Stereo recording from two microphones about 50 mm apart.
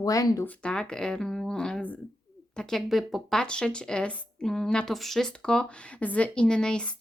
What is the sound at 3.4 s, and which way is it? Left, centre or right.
Speech, centre.